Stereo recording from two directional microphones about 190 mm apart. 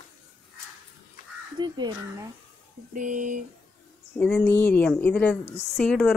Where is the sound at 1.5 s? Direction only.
20° right (ahead or behind).